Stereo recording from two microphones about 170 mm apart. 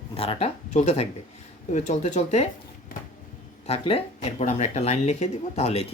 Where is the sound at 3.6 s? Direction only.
35° left (ahead or behind).